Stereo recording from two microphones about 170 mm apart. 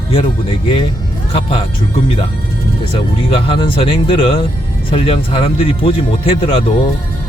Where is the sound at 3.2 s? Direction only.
35° left (ahead or behind).